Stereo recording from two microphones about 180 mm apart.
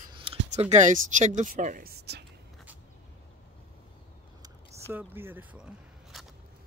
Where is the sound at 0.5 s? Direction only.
40° right (ahead or behind); by 2.2 s 65° right (ahead or behind).